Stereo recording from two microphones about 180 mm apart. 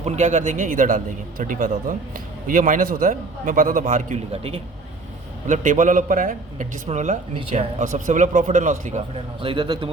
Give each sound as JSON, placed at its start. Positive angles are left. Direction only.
{"t": 0.0, "sound": "a man's voice", "side_deg": -40}
{"t": 5.5, "sound": "a man's voice", "side_deg": -45}
{"t": 9.4, "sound": "a man's voice", "side_deg": -30}